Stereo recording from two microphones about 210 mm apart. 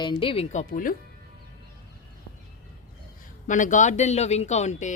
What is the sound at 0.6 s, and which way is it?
Speech, 40° left (ahead or behind).